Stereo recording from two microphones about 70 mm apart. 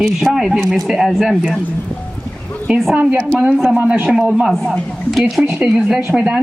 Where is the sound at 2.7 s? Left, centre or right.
Centre.